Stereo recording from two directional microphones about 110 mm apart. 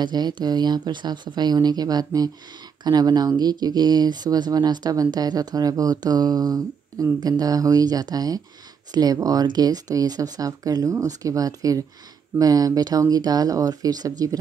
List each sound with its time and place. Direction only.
0.0 s speech: 40° right (ahead or behind)